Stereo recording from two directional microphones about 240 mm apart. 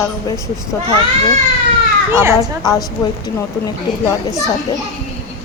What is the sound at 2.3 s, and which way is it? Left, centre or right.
Speech, centre.